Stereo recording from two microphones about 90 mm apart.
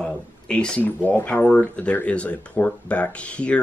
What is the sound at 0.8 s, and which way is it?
Speech, 20° left (ahead or behind).